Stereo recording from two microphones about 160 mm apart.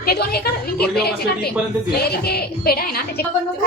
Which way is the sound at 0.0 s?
75° left (ahead or behind).